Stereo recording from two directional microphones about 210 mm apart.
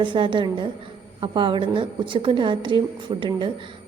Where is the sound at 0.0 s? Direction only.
20° right (ahead or behind).